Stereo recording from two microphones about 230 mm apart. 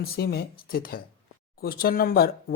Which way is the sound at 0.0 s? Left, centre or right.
Left.